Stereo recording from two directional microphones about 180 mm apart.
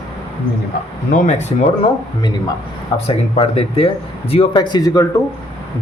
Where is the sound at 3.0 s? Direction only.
30° left (ahead or behind).